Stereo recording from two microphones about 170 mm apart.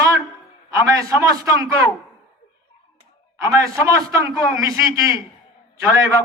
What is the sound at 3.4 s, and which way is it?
A man's voice, 20° right (ahead or behind).